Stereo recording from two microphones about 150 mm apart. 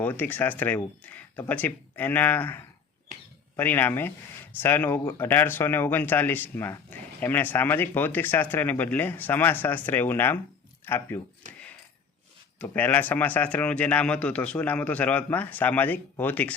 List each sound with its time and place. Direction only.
0.0 s speech: 10° left (ahead or behind)
12.5 s speech: 10° left (ahead or behind)